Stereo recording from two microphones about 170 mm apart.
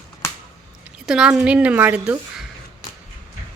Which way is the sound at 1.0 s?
5° right (ahead or behind).